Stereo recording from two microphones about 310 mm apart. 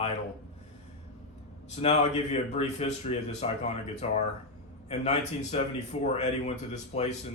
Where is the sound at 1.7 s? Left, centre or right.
Left.